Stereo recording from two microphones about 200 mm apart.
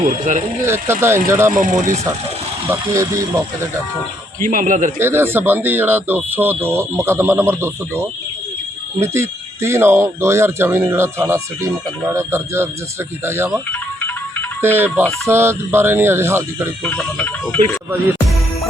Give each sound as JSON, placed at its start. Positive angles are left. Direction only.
{"t": 0.0, "sound": "a man's voice", "side_deg": -40}
{"t": 0.6, "sound": "speech", "side_deg": -15}
{"t": 1.5, "sound": "a man's voice", "side_deg": -40}
{"t": 2.8, "sound": "speech", "side_deg": -15}
{"t": 4.4, "sound": "a man's voice", "side_deg": -40}
{"t": 4.9, "sound": "speech", "side_deg": -10}
{"t": 14.6, "sound": "speech", "side_deg": -10}
{"t": 16.8, "sound": "speech", "side_deg": 10}